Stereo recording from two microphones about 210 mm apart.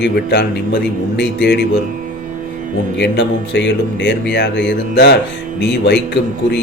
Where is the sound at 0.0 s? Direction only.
55° left (ahead or behind).